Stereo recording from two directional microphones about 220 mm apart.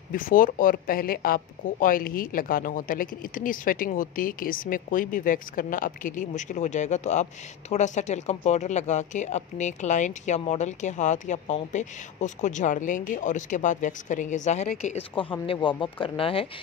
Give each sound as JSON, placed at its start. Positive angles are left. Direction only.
{"t": 0.1, "sound": "speech", "side_deg": 40}